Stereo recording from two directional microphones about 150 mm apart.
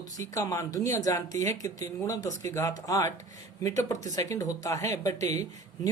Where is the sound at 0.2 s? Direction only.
25° left (ahead or behind).